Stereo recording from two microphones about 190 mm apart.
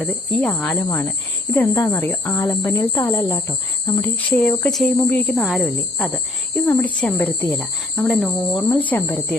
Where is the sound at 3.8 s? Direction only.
20° left (ahead or behind).